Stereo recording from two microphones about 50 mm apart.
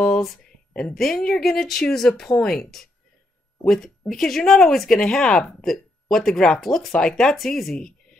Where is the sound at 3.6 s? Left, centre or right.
Centre.